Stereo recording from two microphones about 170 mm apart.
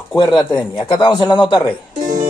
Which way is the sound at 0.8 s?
30° left (ahead or behind).